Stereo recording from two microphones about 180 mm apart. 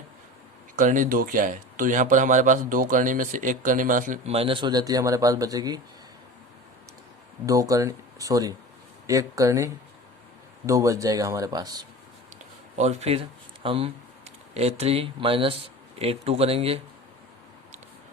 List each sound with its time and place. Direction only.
0.8 s speech: 45° right (ahead or behind); by 5.8 s 20° right (ahead or behind)
7.4 s speech: 20° right (ahead or behind)
10.7 s speech: 15° right (ahead or behind)
12.7 s speech: 40° right (ahead or behind)